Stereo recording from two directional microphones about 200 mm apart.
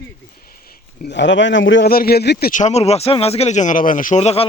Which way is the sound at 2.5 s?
35° left (ahead or behind).